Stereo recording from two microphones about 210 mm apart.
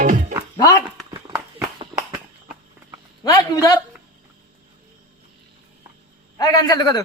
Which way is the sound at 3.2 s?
15° left (ahead or behind).